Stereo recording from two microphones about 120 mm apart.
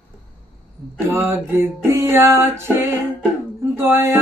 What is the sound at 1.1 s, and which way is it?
Music, 20° right (ahead or behind).